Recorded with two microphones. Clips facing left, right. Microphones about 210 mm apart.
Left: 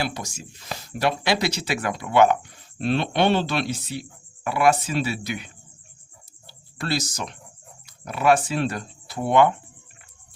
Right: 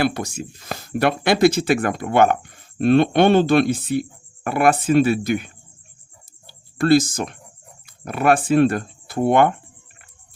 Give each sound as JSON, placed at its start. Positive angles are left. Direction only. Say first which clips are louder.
{"t": 0.0, "sound": "speech", "louder": "right 8 dB", "side_deg": -60}
{"t": 6.5, "sound": "speech", "louder": "right 12 dB", "side_deg": -50}